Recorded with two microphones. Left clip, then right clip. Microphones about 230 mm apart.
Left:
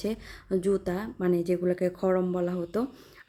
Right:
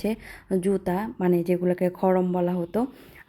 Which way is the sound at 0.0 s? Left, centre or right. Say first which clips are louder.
Right 4 dB; centre.